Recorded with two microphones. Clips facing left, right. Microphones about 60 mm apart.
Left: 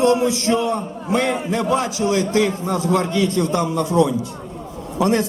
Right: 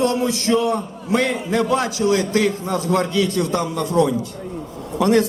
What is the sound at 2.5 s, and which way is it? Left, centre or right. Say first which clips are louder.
Speech: right 1 dB; left.